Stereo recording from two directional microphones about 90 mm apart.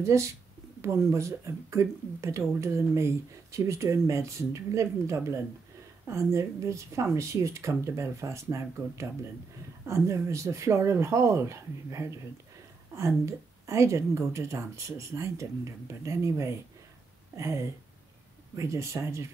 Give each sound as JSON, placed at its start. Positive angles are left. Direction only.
{"t": 0.0, "sound": "speech", "side_deg": -30}
{"t": 13.2, "sound": "speech", "side_deg": -35}